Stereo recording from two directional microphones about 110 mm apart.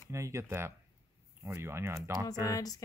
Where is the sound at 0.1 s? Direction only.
25° right (ahead or behind).